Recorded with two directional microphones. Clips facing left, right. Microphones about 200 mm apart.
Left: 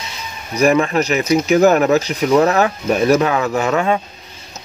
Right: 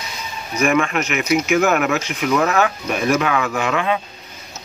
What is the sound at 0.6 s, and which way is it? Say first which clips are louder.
Speech: left 4 dB; 35° left (ahead or behind).